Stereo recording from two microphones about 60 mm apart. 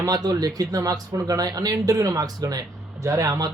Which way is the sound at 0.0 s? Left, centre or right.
Right.